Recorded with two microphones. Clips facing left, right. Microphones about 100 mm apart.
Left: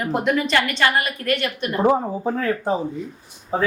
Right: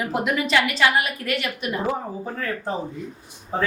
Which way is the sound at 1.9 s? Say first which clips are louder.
Left 7 dB; 20° left (ahead or behind).